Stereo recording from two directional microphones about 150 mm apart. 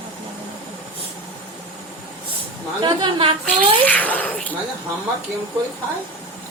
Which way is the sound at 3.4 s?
10° left (ahead or behind).